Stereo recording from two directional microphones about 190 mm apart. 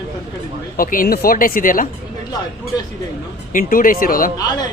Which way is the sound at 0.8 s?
50° left (ahead or behind).